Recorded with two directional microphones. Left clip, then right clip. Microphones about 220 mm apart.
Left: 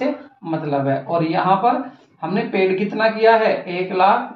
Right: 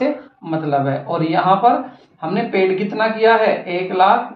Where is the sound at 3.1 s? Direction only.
25° right (ahead or behind).